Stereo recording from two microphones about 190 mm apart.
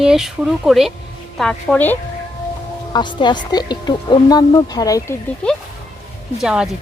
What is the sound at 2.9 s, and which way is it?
Speech, 25° left (ahead or behind).